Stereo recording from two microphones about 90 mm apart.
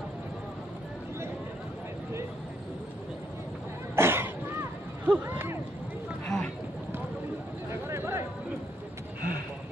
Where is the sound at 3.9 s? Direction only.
25° right (ahead or behind).